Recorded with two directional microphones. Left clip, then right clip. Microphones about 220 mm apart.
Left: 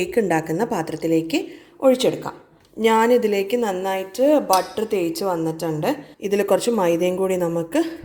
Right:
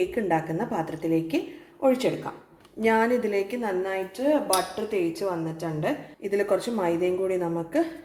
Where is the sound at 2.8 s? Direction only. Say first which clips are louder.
Left 6 dB; 45° left (ahead or behind).